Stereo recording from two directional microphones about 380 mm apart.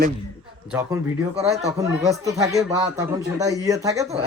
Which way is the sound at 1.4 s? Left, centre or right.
Centre.